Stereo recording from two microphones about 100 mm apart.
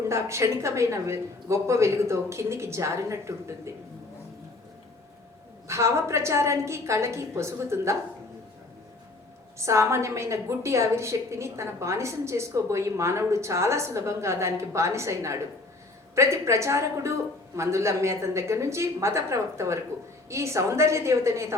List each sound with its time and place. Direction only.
0.1 s a woman's voice: 30° right (ahead or behind)
5.6 s a woman's voice: 30° right (ahead or behind)
9.6 s a woman's voice: 30° right (ahead or behind)